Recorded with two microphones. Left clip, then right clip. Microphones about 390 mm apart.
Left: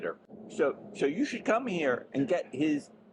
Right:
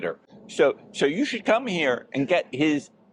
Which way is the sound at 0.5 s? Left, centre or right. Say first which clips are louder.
Right 8 dB; right.